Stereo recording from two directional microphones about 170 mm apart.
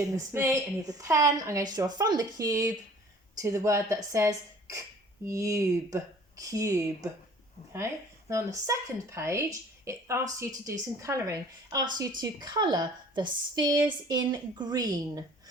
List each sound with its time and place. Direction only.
0.1 s a woman's voice: 20° right (ahead or behind)
8.3 s a woman's voice: 15° right (ahead or behind)